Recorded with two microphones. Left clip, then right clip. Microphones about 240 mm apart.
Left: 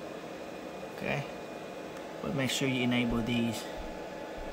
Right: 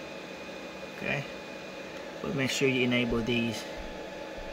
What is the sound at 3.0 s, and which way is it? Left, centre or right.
Speech, left.